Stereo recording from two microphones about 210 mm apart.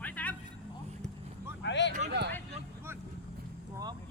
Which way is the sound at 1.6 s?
55° left (ahead or behind).